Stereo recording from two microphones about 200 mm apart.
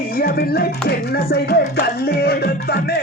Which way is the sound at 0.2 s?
50° left (ahead or behind).